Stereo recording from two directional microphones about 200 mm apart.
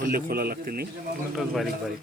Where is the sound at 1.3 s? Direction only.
Centre (ahead or behind).